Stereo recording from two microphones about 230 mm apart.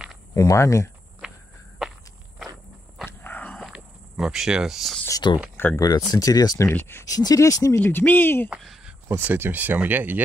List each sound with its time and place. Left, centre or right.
0.3 s speech: centre
3.1 s insect: centre
5.0 s speech: centre
8.5 s speech: centre